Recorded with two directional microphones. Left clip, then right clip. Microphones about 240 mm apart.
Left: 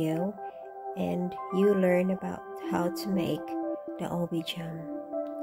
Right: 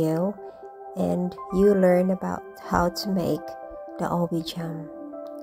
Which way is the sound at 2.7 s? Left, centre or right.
Centre.